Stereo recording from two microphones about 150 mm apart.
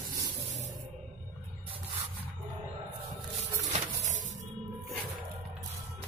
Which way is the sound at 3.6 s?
50° right (ahead or behind).